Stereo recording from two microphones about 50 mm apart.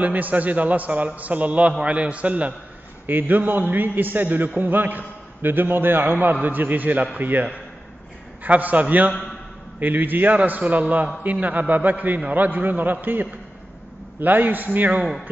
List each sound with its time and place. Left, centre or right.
0.0 s a man's voice: right
3.1 s a man's voice: right
8.5 s a man's voice: right